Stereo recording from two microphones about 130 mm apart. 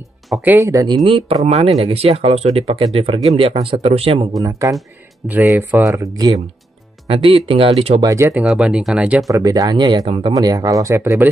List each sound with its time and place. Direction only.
0.4 s speech: 15° right (ahead or behind)
0.8 s speech: 40° right (ahead or behind)
4.4 s speech: 25° right (ahead or behind)
6.1 s speech: 30° right (ahead or behind)
7.1 s speech: 45° right (ahead or behind)
8.0 s speech: 25° right (ahead or behind)
8.5 s speech: 5° right (ahead or behind)
9.3 s speech: 25° right (ahead or behind)
10.0 s speech: 45° right (ahead or behind)
10.3 s speech: 25° right (ahead or behind)